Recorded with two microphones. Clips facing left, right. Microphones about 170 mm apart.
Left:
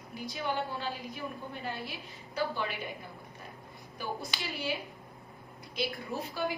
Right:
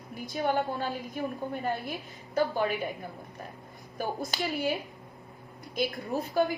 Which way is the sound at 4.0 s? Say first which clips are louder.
Right 5 dB; 45° right (ahead or behind).